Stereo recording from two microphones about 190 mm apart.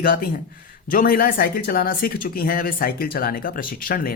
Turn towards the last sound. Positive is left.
turn(degrees=50)  # may be behind; listen again after turning